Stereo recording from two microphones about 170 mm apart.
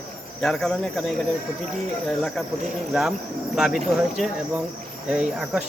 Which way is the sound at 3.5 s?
Centre (ahead or behind).